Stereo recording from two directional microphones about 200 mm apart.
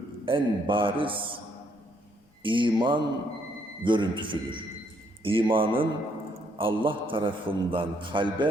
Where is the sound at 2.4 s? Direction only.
25° right (ahead or behind).